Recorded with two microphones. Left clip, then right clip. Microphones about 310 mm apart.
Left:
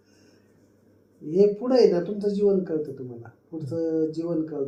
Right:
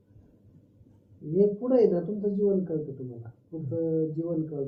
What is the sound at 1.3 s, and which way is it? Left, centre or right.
Speech, left.